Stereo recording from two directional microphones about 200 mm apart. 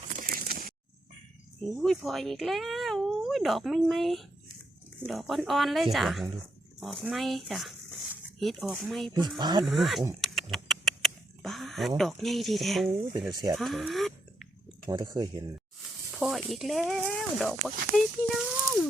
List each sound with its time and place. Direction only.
0.2 s a sound: 45° right (ahead or behind)
1.8 s speech: centre (ahead or behind)
9.4 s speech: 20° right (ahead or behind)
9.6 s speech: centre (ahead or behind)
10.2 s rodents: centre (ahead or behind)
13.1 s speech: 20° right (ahead or behind)
13.6 s speech: centre (ahead or behind)
14.8 s speech: 20° right (ahead or behind)
16.1 s speech: centre (ahead or behind)